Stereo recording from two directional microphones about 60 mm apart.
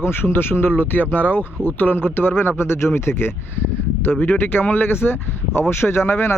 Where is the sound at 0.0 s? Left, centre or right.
Left.